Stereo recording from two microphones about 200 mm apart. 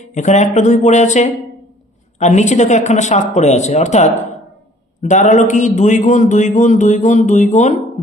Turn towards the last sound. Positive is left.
turn(degrees=35)  # may be behind; listen again after turning